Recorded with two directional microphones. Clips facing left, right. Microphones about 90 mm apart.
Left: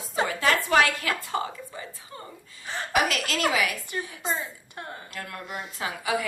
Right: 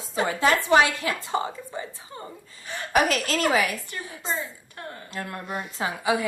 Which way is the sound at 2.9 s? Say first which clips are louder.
Right 3 dB; 35° right (ahead or behind).